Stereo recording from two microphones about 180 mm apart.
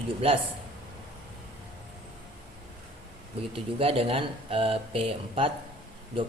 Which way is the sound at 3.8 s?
30° right (ahead or behind).